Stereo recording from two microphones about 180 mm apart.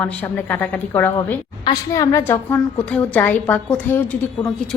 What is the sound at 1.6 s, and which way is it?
A woman's voice, 20° left (ahead or behind).